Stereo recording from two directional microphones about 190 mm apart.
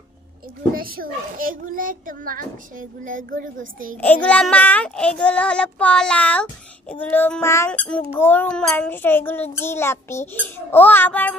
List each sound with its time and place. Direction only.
0.7 s a child's voice: 50° right (ahead or behind)
4.0 s child singing: 5° left (ahead or behind)